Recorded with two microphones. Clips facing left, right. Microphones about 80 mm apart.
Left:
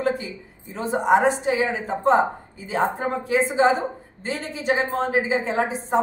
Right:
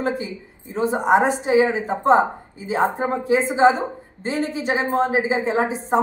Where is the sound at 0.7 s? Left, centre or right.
Centre.